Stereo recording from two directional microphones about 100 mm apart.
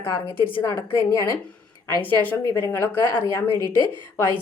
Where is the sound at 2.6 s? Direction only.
20° left (ahead or behind).